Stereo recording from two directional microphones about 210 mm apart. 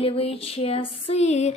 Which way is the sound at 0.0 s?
25° left (ahead or behind).